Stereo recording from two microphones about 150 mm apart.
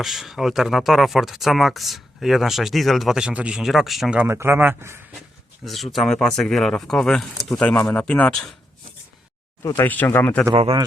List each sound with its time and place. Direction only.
0.0 s speech: centre (ahead or behind)
4.2 s speech: 15° right (ahead or behind)
5.6 s speech: centre (ahead or behind)
9.6 s speech: 15° left (ahead or behind)
10.5 s a man's voice: 35° right (ahead or behind)